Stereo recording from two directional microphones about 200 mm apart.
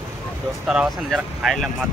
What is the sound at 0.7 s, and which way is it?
Speech, centre (ahead or behind).